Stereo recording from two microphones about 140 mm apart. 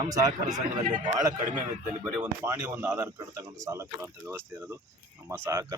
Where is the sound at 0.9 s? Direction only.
35° right (ahead or behind).